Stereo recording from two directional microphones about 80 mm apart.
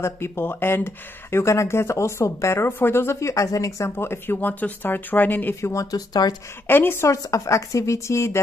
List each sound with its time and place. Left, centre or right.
0.0 s speech: left
3.9 s speech: left
5.6 s speech: left
6.7 s speech: left
7.2 s speech: left